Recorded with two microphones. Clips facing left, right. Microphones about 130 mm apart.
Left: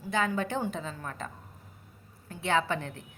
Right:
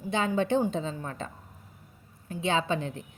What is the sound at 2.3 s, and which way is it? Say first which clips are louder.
Speech: right 1 dB; 20° right (ahead or behind).